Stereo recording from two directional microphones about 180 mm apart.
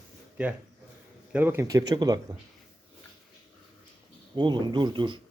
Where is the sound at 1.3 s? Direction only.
10° right (ahead or behind).